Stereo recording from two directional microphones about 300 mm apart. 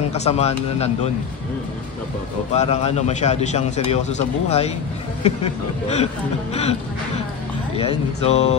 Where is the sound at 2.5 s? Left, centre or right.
Left.